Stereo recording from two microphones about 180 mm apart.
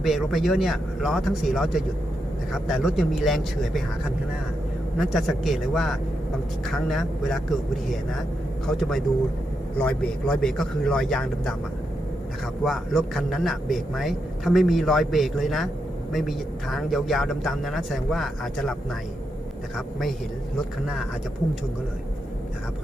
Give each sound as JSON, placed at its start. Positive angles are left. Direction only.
{"t": 0.0, "sound": "a man's voice", "side_deg": 0}
{"t": 4.9, "sound": "a man's voice", "side_deg": 0}
{"t": 8.6, "sound": "a man's voice", "side_deg": 0}
{"t": 12.6, "sound": "a man's voice", "side_deg": 0}